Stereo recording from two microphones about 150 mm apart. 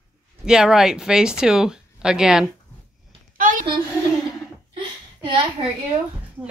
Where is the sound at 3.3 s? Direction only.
65° right (ahead or behind).